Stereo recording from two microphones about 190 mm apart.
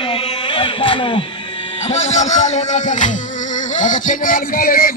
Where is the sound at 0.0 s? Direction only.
30° left (ahead or behind).